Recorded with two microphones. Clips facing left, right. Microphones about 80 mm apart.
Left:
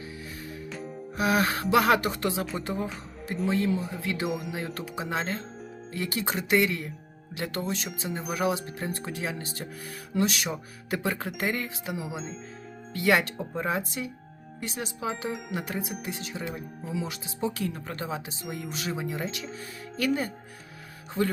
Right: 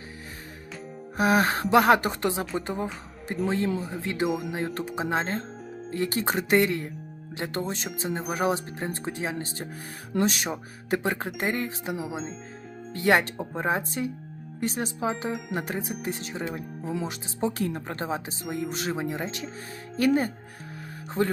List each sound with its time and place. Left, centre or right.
1.1 s speech: right
15.3 s music: centre
15.5 s a man's voice: right